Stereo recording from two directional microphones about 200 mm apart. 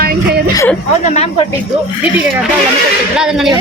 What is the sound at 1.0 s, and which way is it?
Speech, 35° left (ahead or behind).